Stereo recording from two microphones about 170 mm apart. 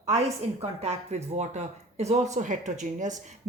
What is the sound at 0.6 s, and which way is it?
Speech, 40° right (ahead or behind).